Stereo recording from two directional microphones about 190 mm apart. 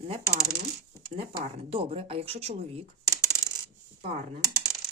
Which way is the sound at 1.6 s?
30° right (ahead or behind).